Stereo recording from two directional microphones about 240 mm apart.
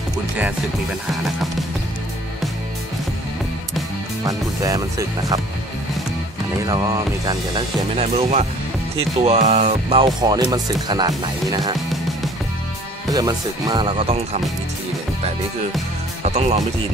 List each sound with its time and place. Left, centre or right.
1.1 s music: centre
4.2 s speech: centre
6.6 s speech: centre
13.1 s speech: centre
16.3 s speech: right